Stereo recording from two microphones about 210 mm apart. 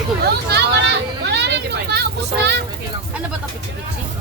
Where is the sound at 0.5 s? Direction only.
55° right (ahead or behind).